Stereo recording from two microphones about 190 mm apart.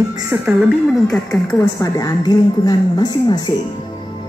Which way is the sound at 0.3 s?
10° right (ahead or behind).